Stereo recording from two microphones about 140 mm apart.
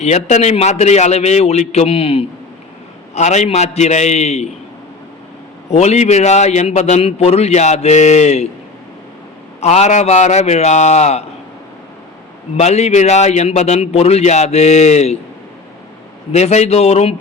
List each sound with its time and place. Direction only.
0.0 s a man's voice: 55° left (ahead or behind)
3.2 s a man's voice: 55° left (ahead or behind)
5.7 s a man's voice: 50° left (ahead or behind)
9.6 s a man's voice: 55° left (ahead or behind)
12.5 s a man's voice: 55° left (ahead or behind)
16.3 s a man's voice: 50° left (ahead or behind)